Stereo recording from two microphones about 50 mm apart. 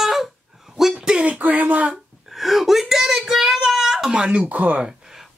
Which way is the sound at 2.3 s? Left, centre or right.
Centre.